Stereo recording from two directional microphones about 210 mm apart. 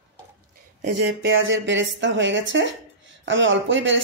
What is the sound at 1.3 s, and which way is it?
Speech, 65° right (ahead or behind).